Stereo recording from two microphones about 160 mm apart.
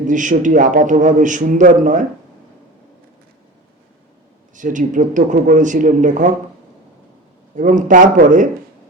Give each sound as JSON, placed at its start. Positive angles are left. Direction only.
{"t": 0.1, "sound": "a man's voice", "side_deg": -55}
{"t": 4.5, "sound": "a man's voice", "side_deg": -55}
{"t": 7.5, "sound": "a man's voice", "side_deg": -50}